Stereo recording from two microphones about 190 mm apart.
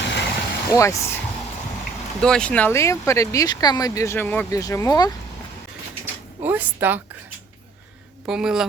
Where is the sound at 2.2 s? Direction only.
5° left (ahead or behind).